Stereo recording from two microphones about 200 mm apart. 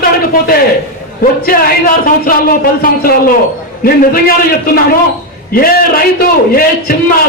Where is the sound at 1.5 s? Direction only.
45° left (ahead or behind).